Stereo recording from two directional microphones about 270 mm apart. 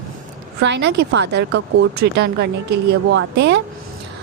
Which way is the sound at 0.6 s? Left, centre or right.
Right.